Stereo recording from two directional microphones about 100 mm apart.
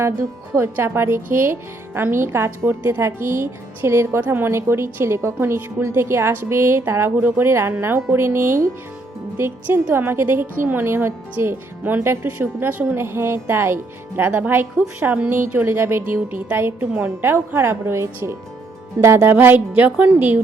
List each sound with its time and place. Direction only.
0.5 s a woman's voice: 25° right (ahead or behind)